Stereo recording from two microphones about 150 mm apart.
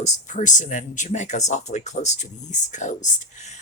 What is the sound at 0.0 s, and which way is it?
Speech, 55° left (ahead or behind).